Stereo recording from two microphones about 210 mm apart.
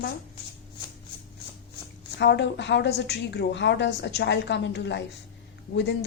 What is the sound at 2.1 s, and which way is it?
A woman's voice, 55° left (ahead or behind).